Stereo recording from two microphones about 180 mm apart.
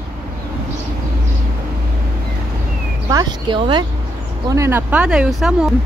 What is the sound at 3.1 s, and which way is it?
Speech, 20° right (ahead or behind).